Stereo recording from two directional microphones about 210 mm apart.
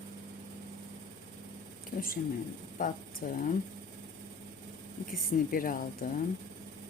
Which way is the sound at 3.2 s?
40° left (ahead or behind).